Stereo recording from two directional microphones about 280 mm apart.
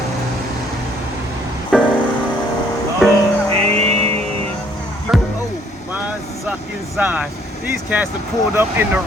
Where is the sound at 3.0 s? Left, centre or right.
Centre.